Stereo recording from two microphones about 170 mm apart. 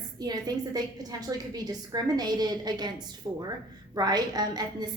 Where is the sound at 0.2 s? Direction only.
25° right (ahead or behind).